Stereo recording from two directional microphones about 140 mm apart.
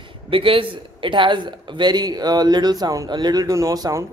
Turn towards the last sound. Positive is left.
turn(degrees=-25)  # may be behind; listen again after turning